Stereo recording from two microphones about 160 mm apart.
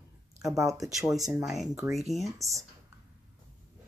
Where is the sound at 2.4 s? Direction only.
20° right (ahead or behind).